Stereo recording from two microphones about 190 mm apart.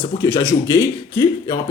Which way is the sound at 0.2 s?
20° left (ahead or behind).